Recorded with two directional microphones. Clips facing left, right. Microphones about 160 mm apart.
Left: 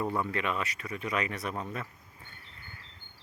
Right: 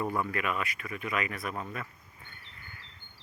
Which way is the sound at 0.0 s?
25° left (ahead or behind).